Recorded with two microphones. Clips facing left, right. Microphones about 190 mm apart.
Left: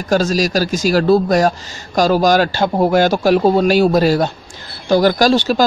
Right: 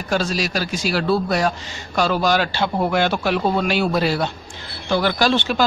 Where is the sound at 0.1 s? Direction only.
40° left (ahead or behind).